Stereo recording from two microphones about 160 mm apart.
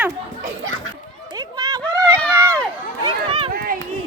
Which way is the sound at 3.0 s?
30° right (ahead or behind).